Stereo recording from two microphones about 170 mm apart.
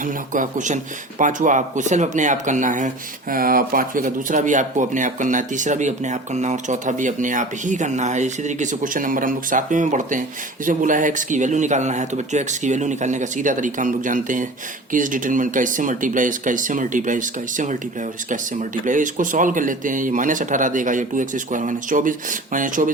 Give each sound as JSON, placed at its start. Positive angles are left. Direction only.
{"t": 0.0, "sound": "speech", "side_deg": -50}
{"t": 18.9, "sound": "speech", "side_deg": -50}